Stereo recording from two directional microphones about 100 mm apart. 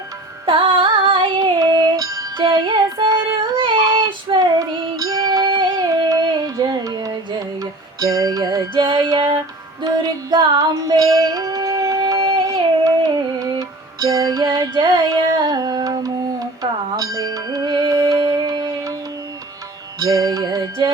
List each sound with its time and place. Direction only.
0.4 s music: 60° right (ahead or behind)
1.4 s music: 40° right (ahead or behind)
2.5 s music: 50° right (ahead or behind)
3.6 s child singing: 55° right (ahead or behind)
4.9 s music: 35° right (ahead or behind)
8.7 s music: 50° right (ahead or behind)
12.8 s music: 40° right (ahead or behind)
18.2 s music: 45° right (ahead or behind)
20.0 s music: 35° right (ahead or behind)